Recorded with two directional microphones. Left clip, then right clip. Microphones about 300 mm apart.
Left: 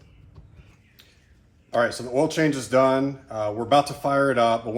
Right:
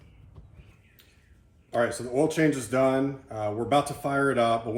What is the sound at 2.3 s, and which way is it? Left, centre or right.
Speech, left.